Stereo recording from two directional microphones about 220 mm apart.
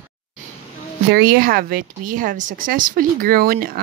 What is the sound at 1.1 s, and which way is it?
Speech, 40° right (ahead or behind).